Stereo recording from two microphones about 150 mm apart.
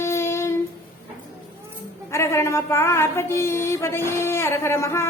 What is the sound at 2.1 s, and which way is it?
Speech, 20° left (ahead or behind).